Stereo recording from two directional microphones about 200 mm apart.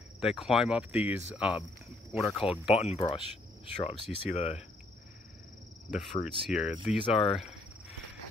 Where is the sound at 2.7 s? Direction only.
30° left (ahead or behind).